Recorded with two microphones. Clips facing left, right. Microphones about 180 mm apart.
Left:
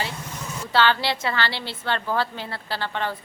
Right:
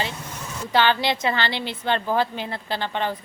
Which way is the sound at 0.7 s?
15° right (ahead or behind).